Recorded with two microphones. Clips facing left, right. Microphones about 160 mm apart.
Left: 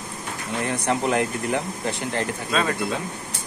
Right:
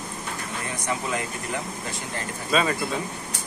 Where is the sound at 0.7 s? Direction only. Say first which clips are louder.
Left 6 dB; 70° left (ahead or behind).